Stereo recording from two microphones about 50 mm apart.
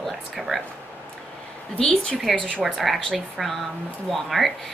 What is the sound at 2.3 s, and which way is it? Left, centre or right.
Speech, left.